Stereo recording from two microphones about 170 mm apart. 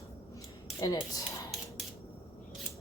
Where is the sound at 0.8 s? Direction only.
20° left (ahead or behind).